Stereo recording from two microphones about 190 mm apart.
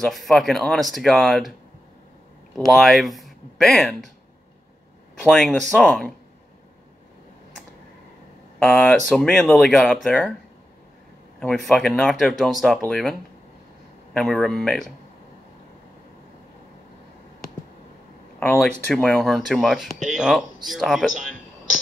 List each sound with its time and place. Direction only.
0.0 s speech: centre (ahead or behind)
2.5 s speech: centre (ahead or behind)
5.2 s speech: centre (ahead or behind)
8.5 s speech: 5° left (ahead or behind)
11.3 s speech: centre (ahead or behind)
18.4 s speech: 10° left (ahead or behind)